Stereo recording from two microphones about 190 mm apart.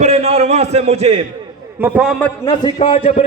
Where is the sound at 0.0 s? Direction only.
35° right (ahead or behind).